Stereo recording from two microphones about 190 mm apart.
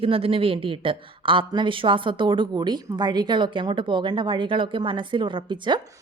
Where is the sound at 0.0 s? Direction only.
30° right (ahead or behind).